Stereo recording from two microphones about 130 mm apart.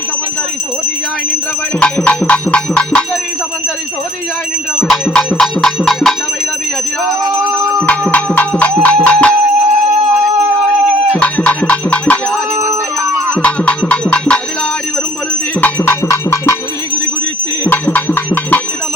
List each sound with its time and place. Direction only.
1.8 s music: 10° left (ahead or behind)
4.9 s cowbell: 5° left (ahead or behind)
7.8 s music: 10° left (ahead or behind)
11.2 s music: 10° left (ahead or behind)
13.4 s music: 10° left (ahead or behind)
15.6 s cowbell: 20° left (ahead or behind)
17.7 s music: 15° left (ahead or behind)